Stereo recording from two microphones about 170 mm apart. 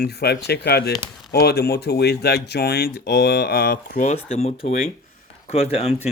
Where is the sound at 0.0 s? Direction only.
70° left (ahead or behind).